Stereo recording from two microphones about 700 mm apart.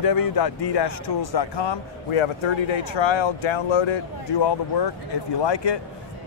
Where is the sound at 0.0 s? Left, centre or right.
Left.